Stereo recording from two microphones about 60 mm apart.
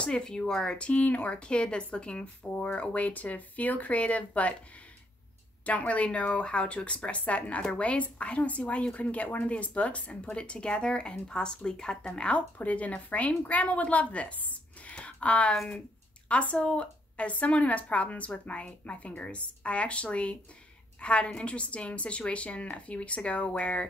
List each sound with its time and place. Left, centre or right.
0.0 s a woman's voice: centre
5.7 s a woman's voice: left